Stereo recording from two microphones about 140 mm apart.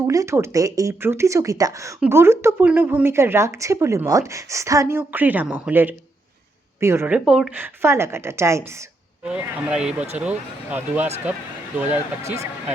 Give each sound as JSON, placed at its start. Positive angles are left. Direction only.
{"t": 0.1, "sound": "speech", "side_deg": -20}
{"t": 7.3, "sound": "speech", "side_deg": -5}
{"t": 7.5, "sound": "speech", "side_deg": -15}
{"t": 9.2, "sound": "speech", "side_deg": -10}